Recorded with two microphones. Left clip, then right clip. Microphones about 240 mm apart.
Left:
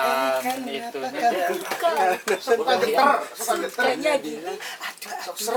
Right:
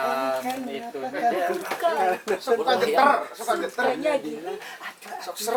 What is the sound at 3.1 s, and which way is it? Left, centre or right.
Speech, centre.